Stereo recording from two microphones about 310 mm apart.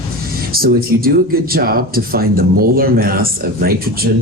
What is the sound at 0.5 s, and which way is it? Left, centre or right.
Speech, right.